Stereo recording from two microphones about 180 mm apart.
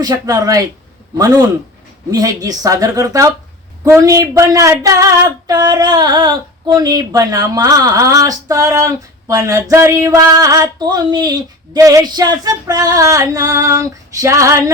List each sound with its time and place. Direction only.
0.0 s female singing: 20° right (ahead or behind)